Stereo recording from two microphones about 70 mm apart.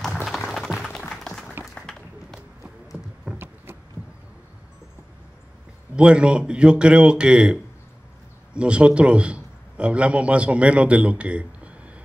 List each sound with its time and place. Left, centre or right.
0.0 s music: centre
1.3 s applause: centre
1.8 s a sound: centre
2.6 s clip-clop: centre
5.9 s speech: centre
8.5 s a man's voice: centre